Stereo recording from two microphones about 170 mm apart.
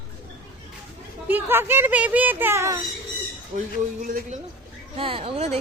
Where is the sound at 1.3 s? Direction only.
15° right (ahead or behind).